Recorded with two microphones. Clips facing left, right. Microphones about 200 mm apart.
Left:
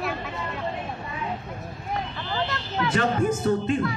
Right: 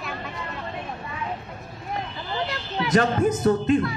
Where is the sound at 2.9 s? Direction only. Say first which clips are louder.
Right 4 dB; 40° right (ahead or behind).